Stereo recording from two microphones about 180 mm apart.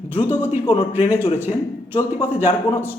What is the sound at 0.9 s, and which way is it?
Speech, 10° right (ahead or behind).